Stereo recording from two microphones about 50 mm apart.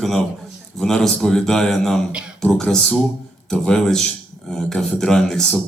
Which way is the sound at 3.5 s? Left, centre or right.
Centre.